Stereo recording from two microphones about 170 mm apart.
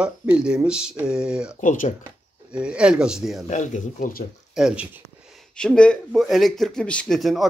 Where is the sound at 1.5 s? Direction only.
50° left (ahead or behind).